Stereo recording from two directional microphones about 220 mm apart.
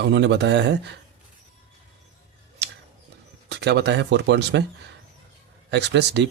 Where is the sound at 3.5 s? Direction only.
50° right (ahead or behind).